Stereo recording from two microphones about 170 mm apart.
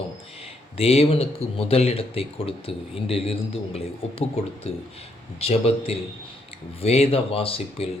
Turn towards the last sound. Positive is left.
turn(degrees=35)  # may be behind; listen again after turning